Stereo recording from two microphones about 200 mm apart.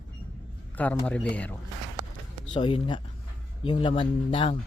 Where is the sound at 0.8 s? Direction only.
5° left (ahead or behind).